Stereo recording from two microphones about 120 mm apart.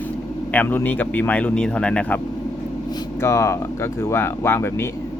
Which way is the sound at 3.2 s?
25° left (ahead or behind).